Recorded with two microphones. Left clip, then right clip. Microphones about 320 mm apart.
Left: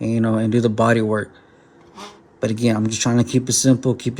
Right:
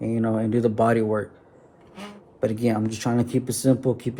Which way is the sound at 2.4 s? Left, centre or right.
Left.